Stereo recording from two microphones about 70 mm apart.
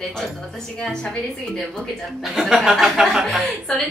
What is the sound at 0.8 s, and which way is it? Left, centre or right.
A woman's voice, centre.